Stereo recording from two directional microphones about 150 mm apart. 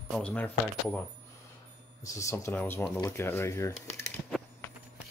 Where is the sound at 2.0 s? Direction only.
20° left (ahead or behind).